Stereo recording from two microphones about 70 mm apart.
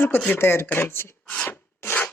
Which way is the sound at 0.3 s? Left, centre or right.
Left.